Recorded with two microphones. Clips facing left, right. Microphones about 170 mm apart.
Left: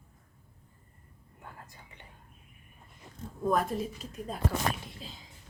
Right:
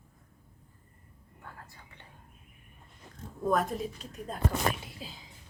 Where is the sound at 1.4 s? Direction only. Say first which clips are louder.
Even; 15° left (ahead or behind).